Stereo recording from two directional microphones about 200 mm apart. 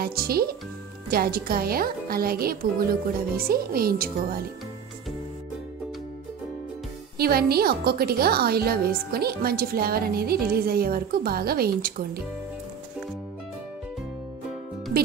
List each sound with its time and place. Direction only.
0.0 s a woman's voice: 50° right (ahead or behind)
7.2 s a woman's voice: 50° right (ahead or behind)